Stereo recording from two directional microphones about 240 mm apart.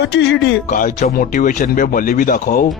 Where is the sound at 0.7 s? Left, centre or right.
Left.